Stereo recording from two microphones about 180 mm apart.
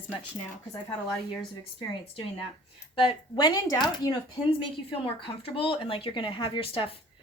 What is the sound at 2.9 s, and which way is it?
Speech, 25° left (ahead or behind).